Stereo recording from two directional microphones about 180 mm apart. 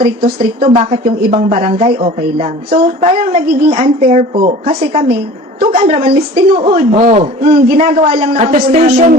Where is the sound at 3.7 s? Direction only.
30° right (ahead or behind).